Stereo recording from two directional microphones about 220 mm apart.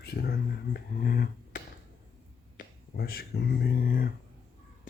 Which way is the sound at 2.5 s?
40° left (ahead or behind).